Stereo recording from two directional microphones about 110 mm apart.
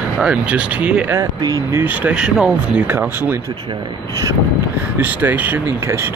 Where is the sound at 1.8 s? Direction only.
15° right (ahead or behind).